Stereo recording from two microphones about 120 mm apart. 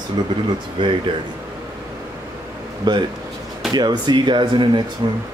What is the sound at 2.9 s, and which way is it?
Speech, 35° right (ahead or behind).